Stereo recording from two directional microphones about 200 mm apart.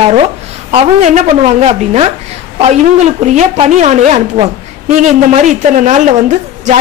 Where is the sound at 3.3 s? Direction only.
35° right (ahead or behind).